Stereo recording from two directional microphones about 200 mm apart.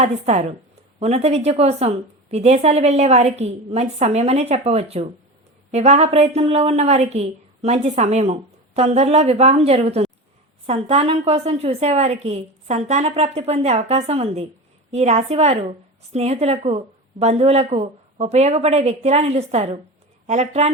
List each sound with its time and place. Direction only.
0.0 s a woman's voice: 35° right (ahead or behind)